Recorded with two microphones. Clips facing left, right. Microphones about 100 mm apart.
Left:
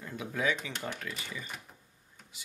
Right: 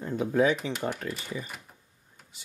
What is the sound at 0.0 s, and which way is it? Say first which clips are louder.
Speech: right 9 dB; 35° right (ahead or behind).